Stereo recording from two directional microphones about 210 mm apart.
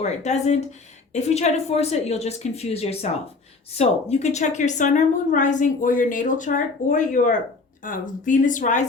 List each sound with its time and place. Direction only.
0.0 s a woman's voice: 30° left (ahead or behind)